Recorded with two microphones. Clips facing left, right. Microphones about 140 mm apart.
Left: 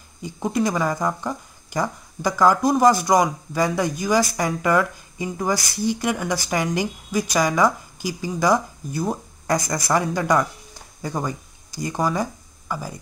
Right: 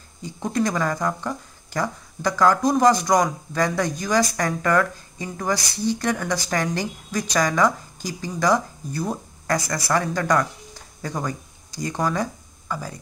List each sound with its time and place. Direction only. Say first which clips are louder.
0.2 s speech: left 1 dB; 10° left (ahead or behind)